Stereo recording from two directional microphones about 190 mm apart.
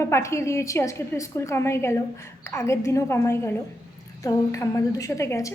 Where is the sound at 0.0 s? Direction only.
15° left (ahead or behind).